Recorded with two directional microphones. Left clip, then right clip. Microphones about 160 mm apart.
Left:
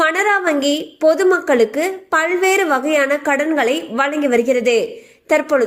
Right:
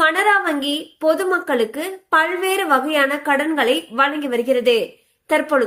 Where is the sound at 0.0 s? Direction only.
40° left (ahead or behind).